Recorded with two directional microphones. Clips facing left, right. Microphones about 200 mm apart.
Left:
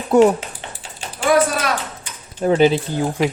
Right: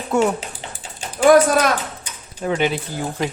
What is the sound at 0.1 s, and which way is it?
Speech, 35° left (ahead or behind).